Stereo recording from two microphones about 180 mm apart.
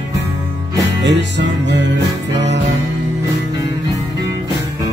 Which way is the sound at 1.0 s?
75° right (ahead or behind).